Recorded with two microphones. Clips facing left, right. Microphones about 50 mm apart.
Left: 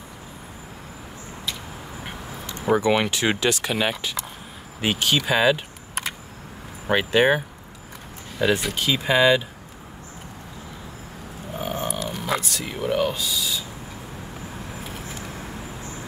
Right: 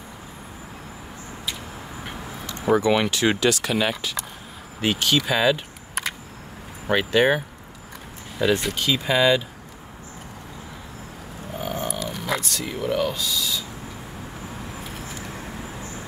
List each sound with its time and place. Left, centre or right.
2.7 s speech: left
6.9 s speech: centre
8.4 s speech: centre
8.7 s speech: centre
11.6 s a sound: left
11.9 s speech: centre